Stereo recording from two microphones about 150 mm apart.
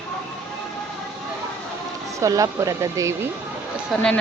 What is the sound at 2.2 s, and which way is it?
Speech, 25° right (ahead or behind).